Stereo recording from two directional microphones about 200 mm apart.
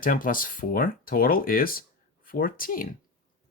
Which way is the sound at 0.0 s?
45° left (ahead or behind).